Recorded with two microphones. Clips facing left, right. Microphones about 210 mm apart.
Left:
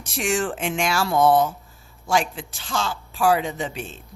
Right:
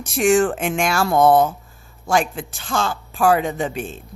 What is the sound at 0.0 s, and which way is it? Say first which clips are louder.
A woman's voice: right 8 dB; 50° right (ahead or behind).